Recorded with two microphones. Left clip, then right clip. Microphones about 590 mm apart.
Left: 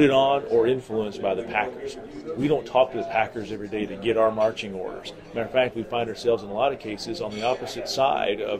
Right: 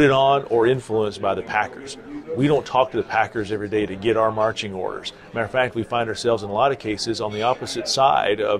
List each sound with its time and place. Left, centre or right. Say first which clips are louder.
0.0 s speech: right 3 dB; right